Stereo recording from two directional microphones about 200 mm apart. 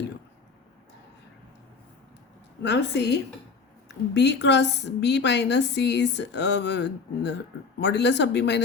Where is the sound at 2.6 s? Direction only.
60° left (ahead or behind).